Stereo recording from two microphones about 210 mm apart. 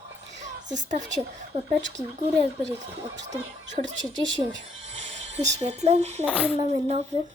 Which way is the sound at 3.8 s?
60° right (ahead or behind).